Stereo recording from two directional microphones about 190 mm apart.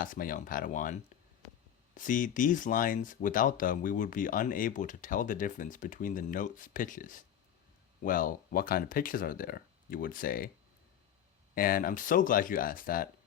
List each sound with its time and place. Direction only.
0.0 s speech: 45° left (ahead or behind)
2.0 s speech: 45° left (ahead or behind)
11.5 s speech: 50° left (ahead or behind)